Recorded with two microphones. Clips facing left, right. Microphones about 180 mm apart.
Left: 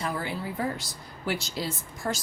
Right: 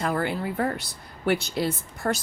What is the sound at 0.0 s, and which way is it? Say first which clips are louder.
Speech: right 5 dB; 55° right (ahead or behind).